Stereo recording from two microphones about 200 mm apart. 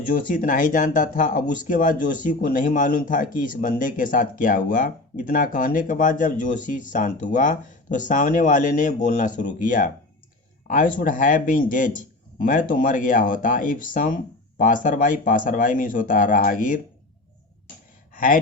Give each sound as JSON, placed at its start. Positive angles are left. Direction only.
{"t": 0.1, "sound": "speech", "side_deg": 40}
{"t": 18.1, "sound": "gasp", "side_deg": 40}